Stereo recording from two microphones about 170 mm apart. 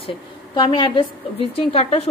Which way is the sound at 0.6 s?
30° left (ahead or behind).